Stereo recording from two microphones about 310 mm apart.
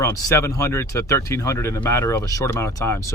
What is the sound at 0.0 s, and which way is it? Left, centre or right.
Speech, centre.